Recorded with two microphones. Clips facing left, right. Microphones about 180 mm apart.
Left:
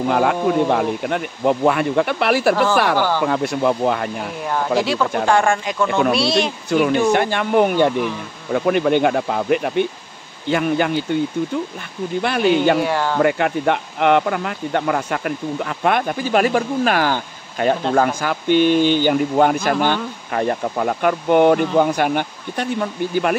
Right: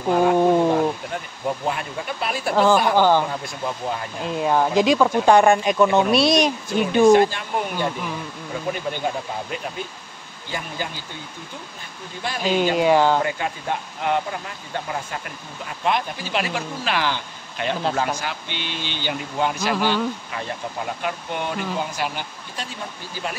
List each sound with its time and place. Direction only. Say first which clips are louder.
0.1 s speech: right 3 dB; 75° left (ahead or behind)
4.4 s speech: right 2 dB; 15° right (ahead or behind)
6.8 s speech: right 2 dB; 65° left (ahead or behind)
12.2 s speech: left 7 dB; 65° left (ahead or behind)
12.7 s speech: right 2 dB; 15° right (ahead or behind)
13.2 s speech: left 9 dB; 70° left (ahead or behind)